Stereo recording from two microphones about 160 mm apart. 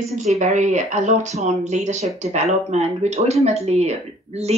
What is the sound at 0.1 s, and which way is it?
Speech, 45° right (ahead or behind).